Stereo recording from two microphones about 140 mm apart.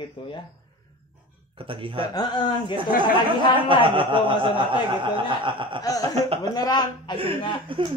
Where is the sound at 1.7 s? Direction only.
40° right (ahead or behind).